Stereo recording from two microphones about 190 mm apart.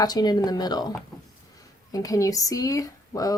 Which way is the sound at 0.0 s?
20° left (ahead or behind).